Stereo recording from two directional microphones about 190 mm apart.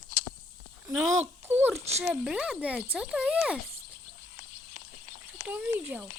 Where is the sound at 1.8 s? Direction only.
35° right (ahead or behind).